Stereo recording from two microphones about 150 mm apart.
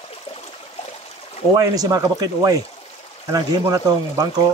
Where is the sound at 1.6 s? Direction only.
25° right (ahead or behind).